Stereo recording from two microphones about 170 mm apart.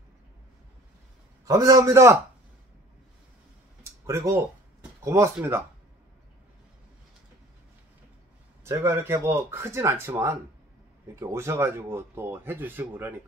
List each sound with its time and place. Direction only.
1.4 s a man's voice: 20° right (ahead or behind)
3.8 s a sound: 15° right (ahead or behind)
5.0 s speech: 15° right (ahead or behind)
8.6 s speech: 15° right (ahead or behind)